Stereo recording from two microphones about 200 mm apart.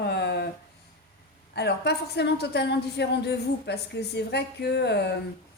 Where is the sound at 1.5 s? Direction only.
55° left (ahead or behind).